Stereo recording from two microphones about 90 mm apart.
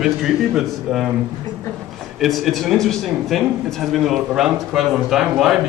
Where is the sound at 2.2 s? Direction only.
Centre (ahead or behind).